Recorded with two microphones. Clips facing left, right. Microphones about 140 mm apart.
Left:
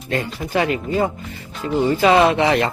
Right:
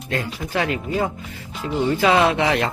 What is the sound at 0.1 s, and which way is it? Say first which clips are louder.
Speech: left 3 dB; centre (ahead or behind).